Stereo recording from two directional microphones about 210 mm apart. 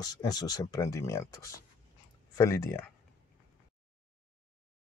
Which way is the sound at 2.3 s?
15° left (ahead or behind).